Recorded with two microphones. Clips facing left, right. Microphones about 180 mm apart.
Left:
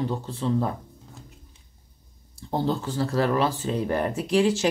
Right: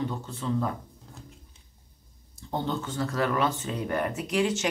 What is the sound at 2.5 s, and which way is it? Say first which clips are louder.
Speech: left 4 dB; 35° left (ahead or behind).